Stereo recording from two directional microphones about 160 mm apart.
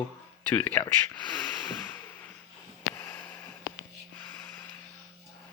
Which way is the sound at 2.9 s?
15° left (ahead or behind).